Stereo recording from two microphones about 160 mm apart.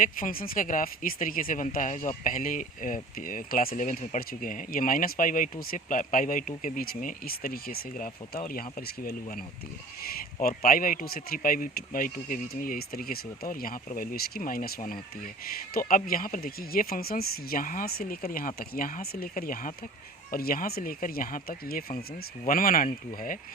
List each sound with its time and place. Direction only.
0.0 s speech: 60° left (ahead or behind)
10.0 s speech: 70° left (ahead or behind)